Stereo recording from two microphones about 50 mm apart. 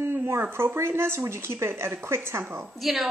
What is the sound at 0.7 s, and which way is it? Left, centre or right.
A woman's voice, right.